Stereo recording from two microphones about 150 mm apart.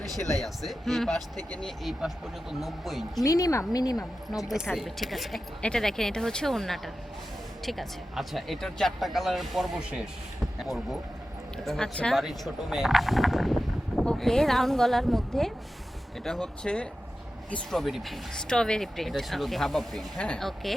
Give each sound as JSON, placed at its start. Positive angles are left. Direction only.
{"t": 0.3, "sound": "speech", "side_deg": 0}
{"t": 3.2, "sound": "speech", "side_deg": 25}
{"t": 3.9, "sound": "speech", "side_deg": 0}